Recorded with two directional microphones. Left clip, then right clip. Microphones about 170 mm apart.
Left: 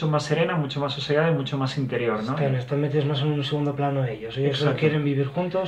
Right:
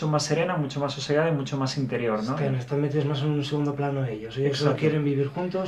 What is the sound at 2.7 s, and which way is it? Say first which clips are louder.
A man's voice: left 2 dB; 5° left (ahead or behind).